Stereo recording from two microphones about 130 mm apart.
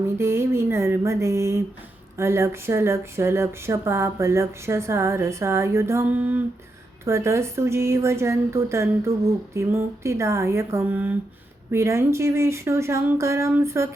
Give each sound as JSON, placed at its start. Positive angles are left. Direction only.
{"t": 0.2, "sound": "speech", "side_deg": -20}